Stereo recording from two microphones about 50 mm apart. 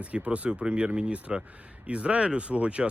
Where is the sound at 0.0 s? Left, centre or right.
Right.